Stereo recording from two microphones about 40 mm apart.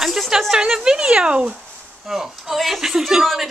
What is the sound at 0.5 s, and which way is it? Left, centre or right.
Speech, centre.